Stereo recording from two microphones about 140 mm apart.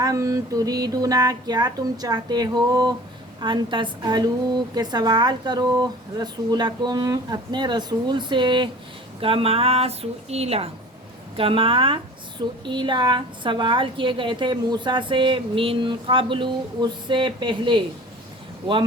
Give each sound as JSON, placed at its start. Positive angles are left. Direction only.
{"t": 0.0, "sound": "a woman's voice", "side_deg": -25}